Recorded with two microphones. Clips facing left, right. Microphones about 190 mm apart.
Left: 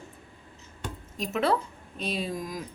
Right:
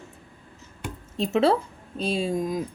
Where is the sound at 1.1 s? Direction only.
30° right (ahead or behind).